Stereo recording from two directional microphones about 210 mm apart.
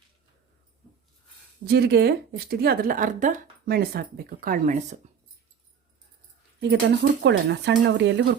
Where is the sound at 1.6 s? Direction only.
50° right (ahead or behind).